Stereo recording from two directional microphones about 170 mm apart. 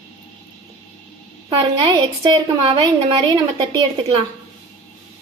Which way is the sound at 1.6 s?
30° right (ahead or behind).